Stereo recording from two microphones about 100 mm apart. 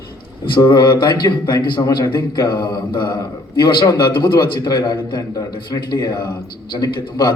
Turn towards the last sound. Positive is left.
turn(degrees=45)  # may be behind; listen again after turning